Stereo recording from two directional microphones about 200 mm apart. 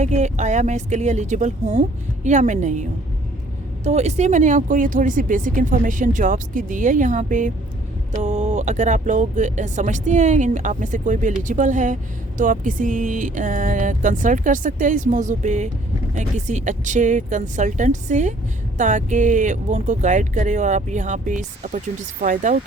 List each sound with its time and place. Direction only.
0.0 s speech: 35° right (ahead or behind)
3.8 s speech: 35° right (ahead or behind)